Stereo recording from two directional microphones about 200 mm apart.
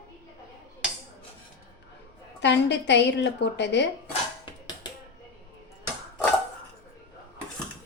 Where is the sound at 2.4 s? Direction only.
60° left (ahead or behind).